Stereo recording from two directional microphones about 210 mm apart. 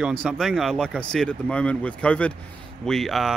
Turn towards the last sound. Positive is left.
turn(degrees=0)  # may be behind; listen again after turning